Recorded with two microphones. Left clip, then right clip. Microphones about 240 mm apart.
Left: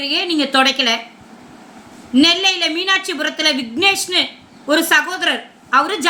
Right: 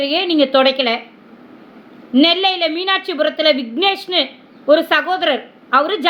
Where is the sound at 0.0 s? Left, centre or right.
Centre.